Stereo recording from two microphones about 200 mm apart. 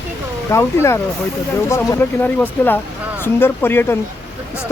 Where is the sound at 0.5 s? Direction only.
15° left (ahead or behind).